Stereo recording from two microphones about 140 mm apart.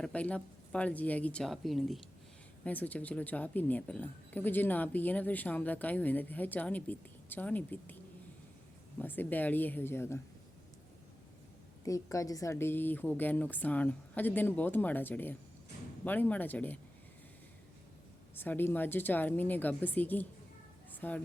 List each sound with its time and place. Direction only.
0.0 s speech: 10° left (ahead or behind)
2.6 s speech: 10° left (ahead or behind)
9.0 s speech: 15° left (ahead or behind)
11.9 s speech: 25° left (ahead or behind)
18.3 s speech: 15° left (ahead or behind)
20.9 s a sound: 10° left (ahead or behind)